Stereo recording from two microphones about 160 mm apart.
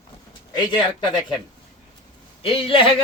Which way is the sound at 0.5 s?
25° left (ahead or behind).